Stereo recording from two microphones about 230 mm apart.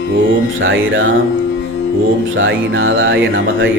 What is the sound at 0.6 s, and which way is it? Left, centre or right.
Speech, right.